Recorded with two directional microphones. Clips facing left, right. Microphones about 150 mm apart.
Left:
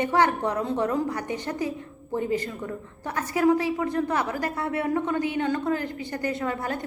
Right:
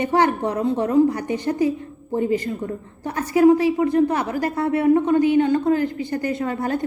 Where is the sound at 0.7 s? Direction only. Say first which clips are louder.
Right 8 dB; 30° right (ahead or behind).